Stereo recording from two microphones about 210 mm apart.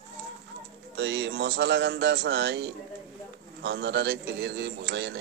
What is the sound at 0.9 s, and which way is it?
Speech, 55° right (ahead or behind).